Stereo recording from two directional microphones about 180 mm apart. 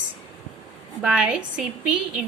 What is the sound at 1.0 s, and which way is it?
A woman's voice, 5° right (ahead or behind).